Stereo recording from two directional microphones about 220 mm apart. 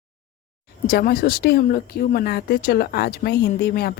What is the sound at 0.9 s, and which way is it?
Speech, 40° left (ahead or behind).